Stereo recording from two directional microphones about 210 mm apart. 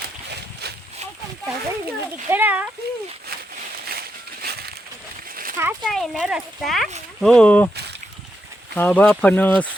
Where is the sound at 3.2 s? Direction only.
45° right (ahead or behind).